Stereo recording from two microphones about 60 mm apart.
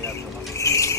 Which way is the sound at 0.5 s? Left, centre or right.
Left.